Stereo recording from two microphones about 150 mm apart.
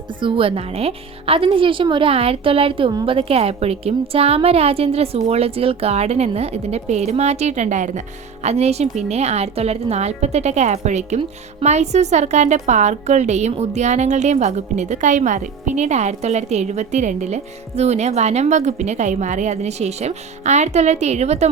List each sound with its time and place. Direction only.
0.2 s a woman's voice: 35° right (ahead or behind)